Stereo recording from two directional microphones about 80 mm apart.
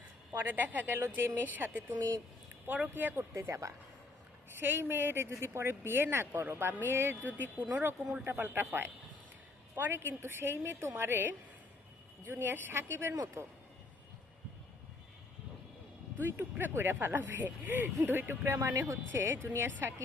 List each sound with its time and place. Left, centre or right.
0.3 s speech: right
2.0 s speech: right
2.6 s speech: right
3.3 s speech: right
16.2 s speech: right